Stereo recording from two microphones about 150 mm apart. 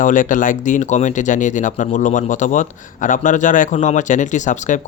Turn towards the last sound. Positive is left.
turn(degrees=55)  # may be behind; listen again after turning